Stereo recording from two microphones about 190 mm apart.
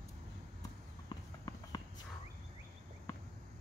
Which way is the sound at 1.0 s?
20° left (ahead or behind).